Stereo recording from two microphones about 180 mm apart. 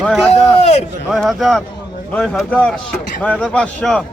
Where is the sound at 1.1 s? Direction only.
Centre (ahead or behind).